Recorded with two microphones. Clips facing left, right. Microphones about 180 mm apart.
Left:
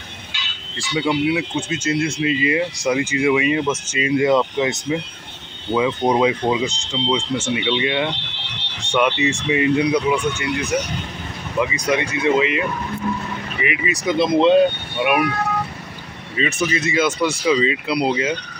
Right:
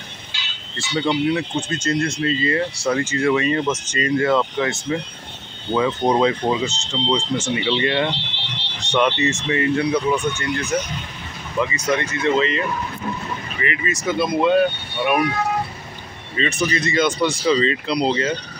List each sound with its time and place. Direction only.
0.7 s speech: 10° left (ahead or behind)
16.3 s speech: 5° left (ahead or behind)